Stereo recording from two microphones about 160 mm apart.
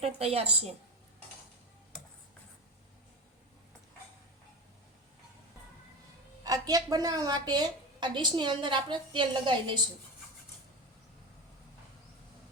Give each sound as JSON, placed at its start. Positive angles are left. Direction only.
{"t": 0.0, "sound": "a woman's voice", "side_deg": -40}
{"t": 6.4, "sound": "a woman's voice", "side_deg": -25}